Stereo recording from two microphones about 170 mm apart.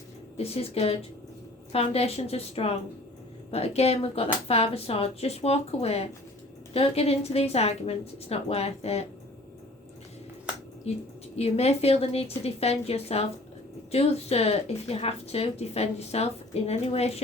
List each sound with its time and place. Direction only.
0.3 s a woman's voice: 35° left (ahead or behind)
10.9 s a woman's voice: 40° left (ahead or behind)